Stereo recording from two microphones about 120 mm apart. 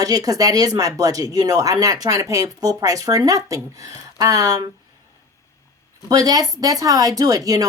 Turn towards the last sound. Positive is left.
turn(degrees=-30)  # may be behind; listen again after turning